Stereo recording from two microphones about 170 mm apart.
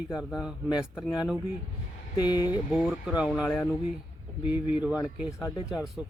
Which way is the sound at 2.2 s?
25° left (ahead or behind).